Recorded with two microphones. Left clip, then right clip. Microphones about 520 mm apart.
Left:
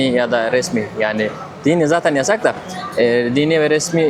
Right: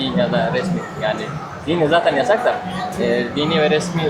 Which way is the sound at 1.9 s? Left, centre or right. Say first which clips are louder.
Even; left.